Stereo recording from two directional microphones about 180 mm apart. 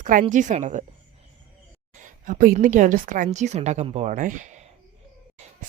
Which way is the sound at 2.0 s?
45° right (ahead or behind).